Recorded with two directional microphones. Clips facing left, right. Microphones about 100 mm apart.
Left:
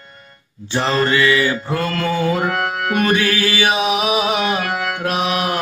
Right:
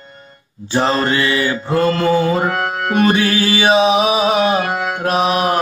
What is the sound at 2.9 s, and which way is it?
Speech, 30° right (ahead or behind).